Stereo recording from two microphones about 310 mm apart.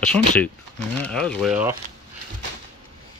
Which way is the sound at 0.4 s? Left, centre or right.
Centre.